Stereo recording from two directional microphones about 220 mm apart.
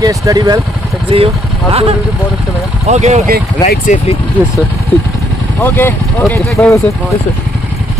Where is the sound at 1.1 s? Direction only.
25° right (ahead or behind).